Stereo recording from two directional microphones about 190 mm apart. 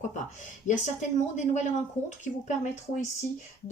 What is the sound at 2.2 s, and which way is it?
Speech, 40° left (ahead or behind).